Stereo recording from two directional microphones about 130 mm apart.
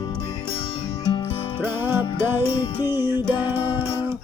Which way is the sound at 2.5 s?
35° left (ahead or behind).